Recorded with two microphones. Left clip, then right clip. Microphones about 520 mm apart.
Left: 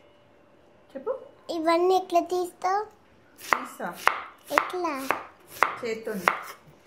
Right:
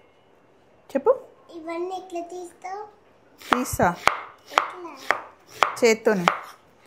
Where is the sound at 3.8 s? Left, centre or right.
Right.